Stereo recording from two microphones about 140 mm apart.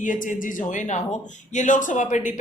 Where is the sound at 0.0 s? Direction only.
70° left (ahead or behind).